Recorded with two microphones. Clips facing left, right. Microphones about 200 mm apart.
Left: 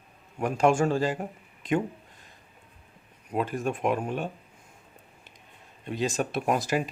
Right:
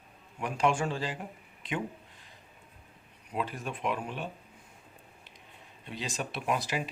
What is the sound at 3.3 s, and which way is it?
Speech, 45° left (ahead or behind).